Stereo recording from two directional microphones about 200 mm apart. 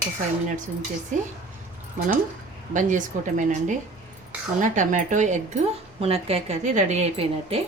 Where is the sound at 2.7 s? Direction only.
40° right (ahead or behind).